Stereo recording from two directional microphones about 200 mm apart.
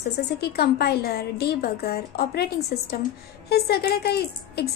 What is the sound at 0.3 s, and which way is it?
A woman's voice, 55° left (ahead or behind).